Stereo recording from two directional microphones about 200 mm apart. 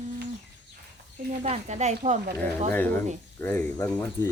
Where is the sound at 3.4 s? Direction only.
10° left (ahead or behind).